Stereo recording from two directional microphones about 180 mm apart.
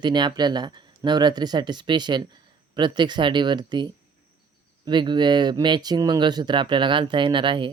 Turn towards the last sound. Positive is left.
turn(degrees=-25)  # may be behind; listen again after turning